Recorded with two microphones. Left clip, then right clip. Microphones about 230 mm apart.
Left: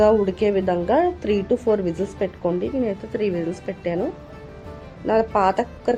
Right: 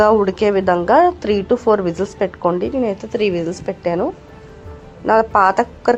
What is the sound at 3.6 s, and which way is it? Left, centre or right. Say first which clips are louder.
Speech: right 6 dB; centre.